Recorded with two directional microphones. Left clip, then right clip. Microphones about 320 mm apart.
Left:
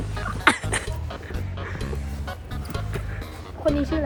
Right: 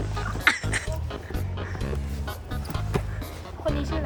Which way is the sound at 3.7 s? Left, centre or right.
Centre.